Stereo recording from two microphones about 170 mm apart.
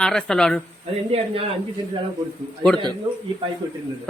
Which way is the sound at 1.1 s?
35° right (ahead or behind).